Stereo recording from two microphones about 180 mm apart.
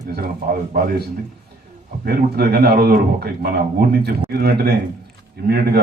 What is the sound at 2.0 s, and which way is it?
Speech, 60° right (ahead or behind).